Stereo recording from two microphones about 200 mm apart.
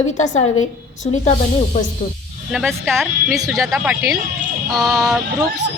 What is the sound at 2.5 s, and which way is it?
A woman's voice, centre (ahead or behind).